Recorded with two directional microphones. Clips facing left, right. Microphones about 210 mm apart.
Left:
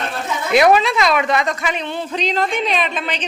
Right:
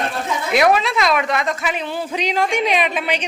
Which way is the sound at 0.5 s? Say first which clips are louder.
Left 3 dB; centre (ahead or behind).